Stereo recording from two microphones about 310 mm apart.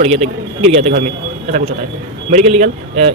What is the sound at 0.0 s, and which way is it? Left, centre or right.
Speech, centre.